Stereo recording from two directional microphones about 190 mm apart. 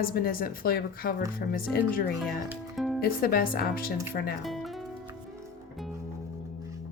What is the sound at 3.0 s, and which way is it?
A woman's voice, 50° left (ahead or behind).